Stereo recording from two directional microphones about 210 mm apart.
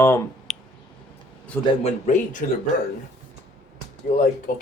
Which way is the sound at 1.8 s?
35° left (ahead or behind).